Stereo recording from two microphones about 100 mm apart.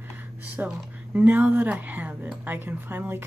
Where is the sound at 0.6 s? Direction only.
15° right (ahead or behind).